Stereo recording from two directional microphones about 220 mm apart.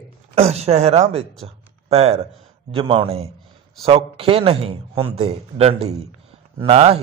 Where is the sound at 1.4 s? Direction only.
30° right (ahead or behind).